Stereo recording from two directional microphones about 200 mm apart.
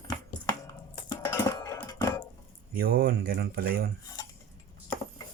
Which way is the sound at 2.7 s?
50° right (ahead or behind).